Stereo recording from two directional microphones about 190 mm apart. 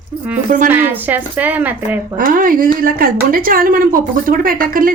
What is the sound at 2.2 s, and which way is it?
A woman's voice, 45° right (ahead or behind).